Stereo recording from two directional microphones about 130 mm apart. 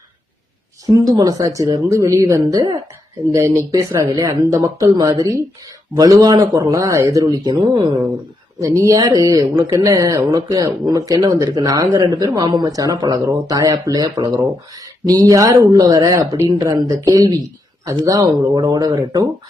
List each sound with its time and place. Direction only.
1.0 s speech: 30° right (ahead or behind)
8.5 s speech: 25° right (ahead or behind)